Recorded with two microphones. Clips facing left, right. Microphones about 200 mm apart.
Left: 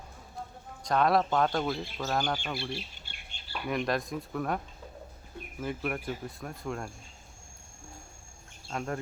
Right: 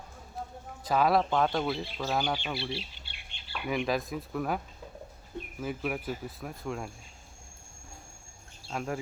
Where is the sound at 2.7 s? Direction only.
45° left (ahead or behind).